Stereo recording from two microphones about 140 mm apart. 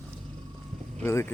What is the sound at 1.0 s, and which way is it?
Speech, 20° left (ahead or behind).